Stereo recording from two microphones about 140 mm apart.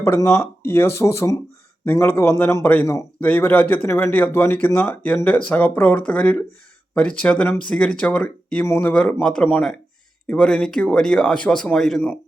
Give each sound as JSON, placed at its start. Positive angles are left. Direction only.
{"t": 0.0, "sound": "speech", "side_deg": 20}